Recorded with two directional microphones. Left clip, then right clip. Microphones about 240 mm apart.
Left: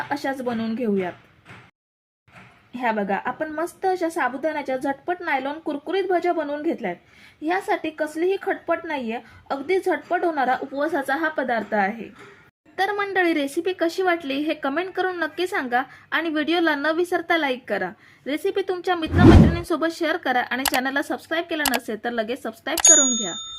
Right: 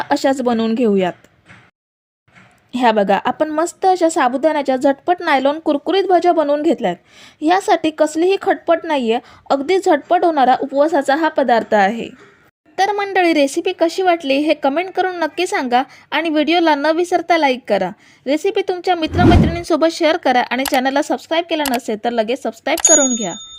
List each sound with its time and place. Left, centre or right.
0.1 s speech: right
2.7 s speech: right
12.7 s speech: right
19.1 s speech: centre
19.5 s speech: right
20.6 s speech: centre
20.8 s speech: right